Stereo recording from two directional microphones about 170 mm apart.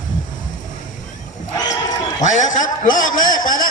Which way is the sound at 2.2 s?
45° left (ahead or behind).